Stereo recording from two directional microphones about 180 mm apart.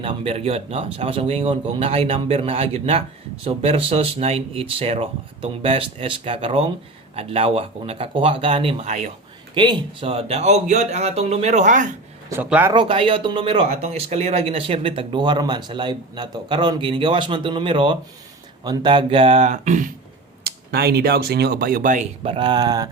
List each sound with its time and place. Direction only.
0.0 s speech: 35° right (ahead or behind)
12.3 s speech: 10° right (ahead or behind)
12.7 s speech: 30° right (ahead or behind)
20.4 s speech: 60° right (ahead or behind)
22.2 s speech: 30° right (ahead or behind)